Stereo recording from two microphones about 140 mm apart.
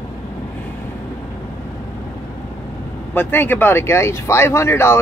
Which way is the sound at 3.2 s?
15° left (ahead or behind).